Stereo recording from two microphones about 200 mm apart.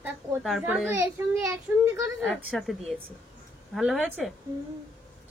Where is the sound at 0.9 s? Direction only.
10° right (ahead or behind).